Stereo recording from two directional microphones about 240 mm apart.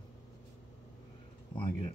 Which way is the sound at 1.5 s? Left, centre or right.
Left.